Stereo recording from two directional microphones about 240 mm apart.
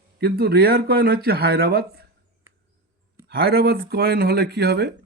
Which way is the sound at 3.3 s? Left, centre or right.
Right.